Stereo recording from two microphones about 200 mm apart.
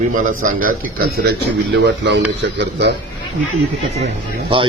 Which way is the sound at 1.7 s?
60° right (ahead or behind).